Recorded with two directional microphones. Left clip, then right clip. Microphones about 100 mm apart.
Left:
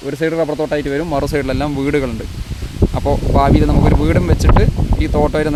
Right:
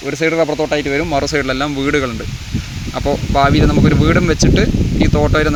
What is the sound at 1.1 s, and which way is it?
Speech, 45° left (ahead or behind).